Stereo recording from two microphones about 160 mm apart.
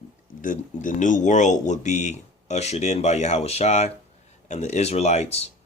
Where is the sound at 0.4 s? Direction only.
55° left (ahead or behind).